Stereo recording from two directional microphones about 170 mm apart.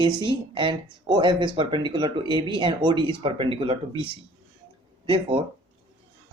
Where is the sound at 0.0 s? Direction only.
30° right (ahead or behind).